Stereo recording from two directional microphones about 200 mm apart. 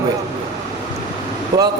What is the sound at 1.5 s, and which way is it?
Speech, 15° right (ahead or behind).